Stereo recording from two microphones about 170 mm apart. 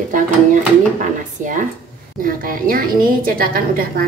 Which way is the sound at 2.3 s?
55° right (ahead or behind).